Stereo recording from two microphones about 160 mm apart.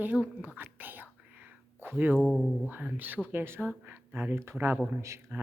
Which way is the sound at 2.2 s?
5° left (ahead or behind).